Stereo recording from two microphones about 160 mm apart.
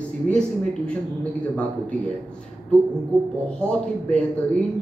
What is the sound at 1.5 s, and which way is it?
Speech, 10° left (ahead or behind).